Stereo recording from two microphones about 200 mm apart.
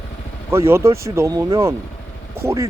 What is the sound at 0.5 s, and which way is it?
Speech, 15° right (ahead or behind).